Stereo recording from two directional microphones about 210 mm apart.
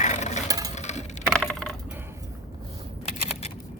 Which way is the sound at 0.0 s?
35° left (ahead or behind).